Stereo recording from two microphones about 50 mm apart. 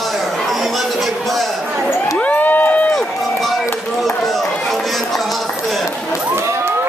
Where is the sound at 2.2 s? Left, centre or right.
Left.